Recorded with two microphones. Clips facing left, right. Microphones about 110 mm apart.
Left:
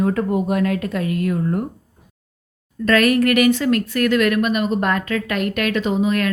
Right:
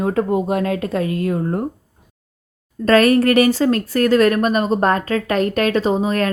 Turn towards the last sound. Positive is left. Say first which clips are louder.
# right 1 dB
turn(degrees=-35)  # may be behind; listen again after turning